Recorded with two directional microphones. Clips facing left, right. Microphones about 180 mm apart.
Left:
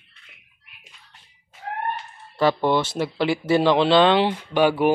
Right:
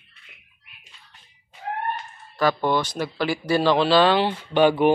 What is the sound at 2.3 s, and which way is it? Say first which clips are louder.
Speech: left 2 dB; 25° left (ahead or behind).